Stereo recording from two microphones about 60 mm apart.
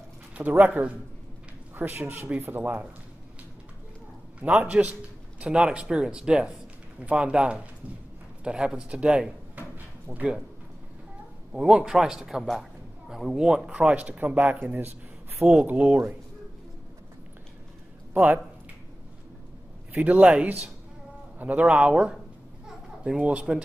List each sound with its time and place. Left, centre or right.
0.3 s speech: right
1.8 s speech: right
4.4 s speech: right
9.6 s a sound: right
11.5 s speech: centre
18.1 s speech: right
20.0 s speech: right